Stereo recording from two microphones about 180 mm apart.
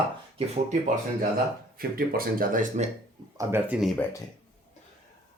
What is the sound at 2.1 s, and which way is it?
Speech, 50° right (ahead or behind).